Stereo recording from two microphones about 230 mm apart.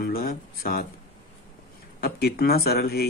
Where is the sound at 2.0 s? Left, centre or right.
Left.